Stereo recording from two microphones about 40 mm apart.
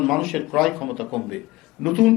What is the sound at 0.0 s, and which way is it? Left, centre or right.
Speech, centre.